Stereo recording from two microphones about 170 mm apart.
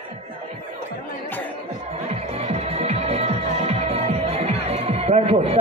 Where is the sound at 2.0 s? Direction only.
40° right (ahead or behind).